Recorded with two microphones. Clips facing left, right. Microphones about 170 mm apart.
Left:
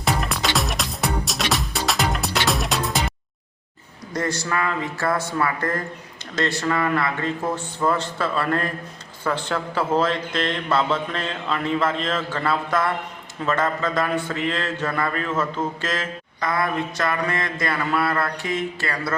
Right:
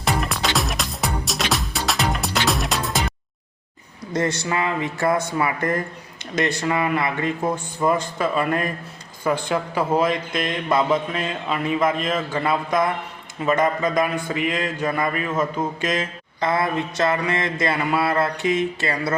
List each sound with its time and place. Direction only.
0.0 s music: centre (ahead or behind)
4.1 s speech: 20° right (ahead or behind)